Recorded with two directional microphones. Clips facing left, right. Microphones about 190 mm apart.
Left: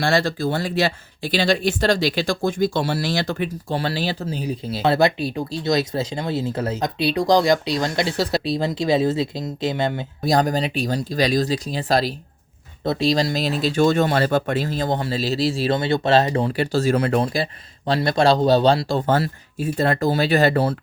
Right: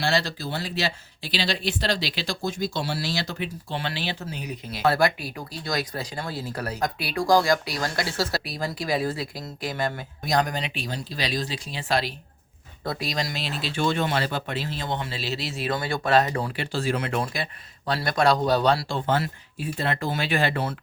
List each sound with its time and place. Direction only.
0.0 s speech: 50° left (ahead or behind)
12.8 s speech: 25° left (ahead or behind)
16.5 s speech: 40° left (ahead or behind)
18.9 s speech: 45° left (ahead or behind)